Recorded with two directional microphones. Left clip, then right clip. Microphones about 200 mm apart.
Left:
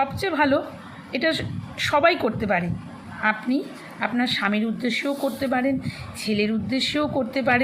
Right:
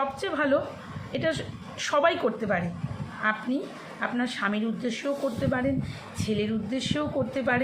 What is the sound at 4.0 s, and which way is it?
Speech, 15° left (ahead or behind).